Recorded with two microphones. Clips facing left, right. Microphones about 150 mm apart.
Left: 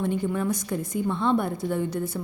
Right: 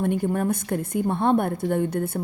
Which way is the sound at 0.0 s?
50° right (ahead or behind).